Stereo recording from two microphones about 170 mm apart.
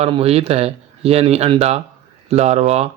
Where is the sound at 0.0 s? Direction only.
35° right (ahead or behind).